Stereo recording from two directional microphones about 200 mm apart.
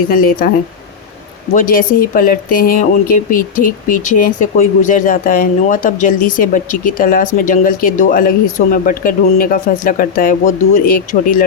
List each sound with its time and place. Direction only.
0.1 s speech: 45° left (ahead or behind)
1.5 s speech: 45° left (ahead or behind)